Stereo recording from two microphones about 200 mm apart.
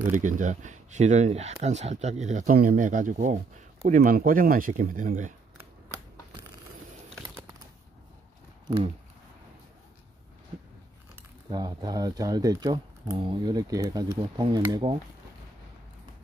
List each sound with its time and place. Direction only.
0.1 s speech: 40° right (ahead or behind)
8.6 s speech: 25° right (ahead or behind)
11.5 s speech: 20° right (ahead or behind)